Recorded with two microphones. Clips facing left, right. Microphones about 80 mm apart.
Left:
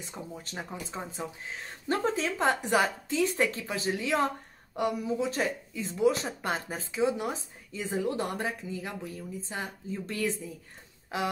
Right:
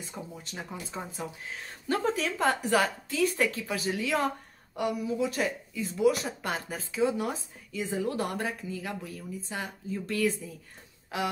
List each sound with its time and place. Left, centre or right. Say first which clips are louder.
0.0 s speech: even; left